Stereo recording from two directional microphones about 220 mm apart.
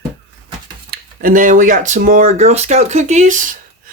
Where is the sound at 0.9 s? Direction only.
40° right (ahead or behind).